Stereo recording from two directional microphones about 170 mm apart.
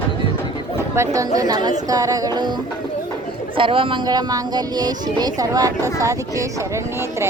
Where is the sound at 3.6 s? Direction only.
30° right (ahead or behind).